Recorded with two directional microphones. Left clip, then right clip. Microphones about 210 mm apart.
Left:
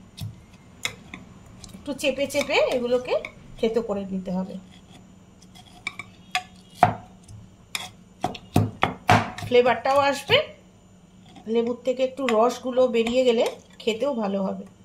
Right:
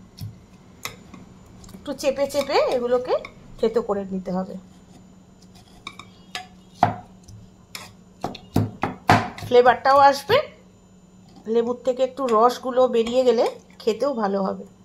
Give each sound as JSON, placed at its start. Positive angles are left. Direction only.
{"t": 1.8, "sound": "speech", "side_deg": -20}
{"t": 8.2, "sound": "chopping", "side_deg": 5}
{"t": 9.5, "sound": "speech", "side_deg": -25}
{"t": 11.4, "sound": "speech", "side_deg": -25}